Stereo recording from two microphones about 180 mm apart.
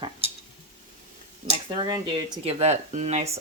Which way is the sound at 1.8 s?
25° right (ahead or behind).